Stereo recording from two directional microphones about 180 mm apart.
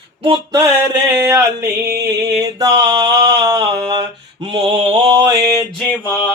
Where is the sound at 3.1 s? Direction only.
65° right (ahead or behind).